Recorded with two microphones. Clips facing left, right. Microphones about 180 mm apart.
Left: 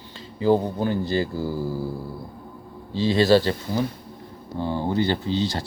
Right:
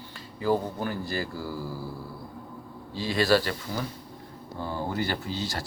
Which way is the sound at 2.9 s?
25° left (ahead or behind).